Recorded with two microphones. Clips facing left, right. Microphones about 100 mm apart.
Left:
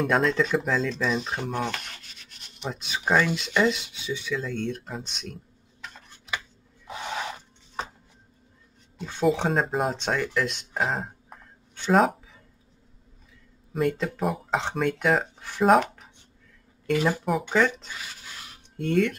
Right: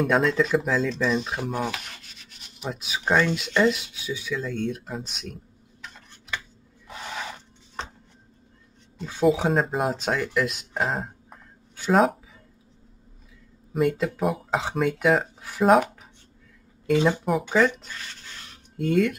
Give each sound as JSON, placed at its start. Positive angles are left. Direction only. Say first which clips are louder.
{"t": 0.0, "sound": "speech", "louder": "right 1 dB", "side_deg": 0}
{"t": 6.9, "sound": "rub", "louder": "left 2 dB", "side_deg": 5}
{"t": 8.9, "sound": "speech", "louder": "right 2 dB", "side_deg": 0}
{"t": 13.7, "sound": "speech", "louder": "right 2 dB", "side_deg": 0}
{"t": 16.9, "sound": "speech", "louder": "right 3 dB", "side_deg": -20}
{"t": 17.2, "sound": "speech", "louder": "right 2 dB", "side_deg": 0}